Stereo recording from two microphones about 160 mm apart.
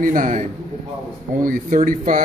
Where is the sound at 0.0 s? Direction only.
55° right (ahead or behind).